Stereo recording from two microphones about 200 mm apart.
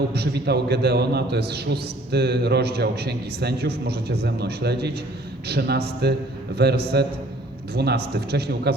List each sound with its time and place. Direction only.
0.1 s a man's voice: 55° right (ahead or behind)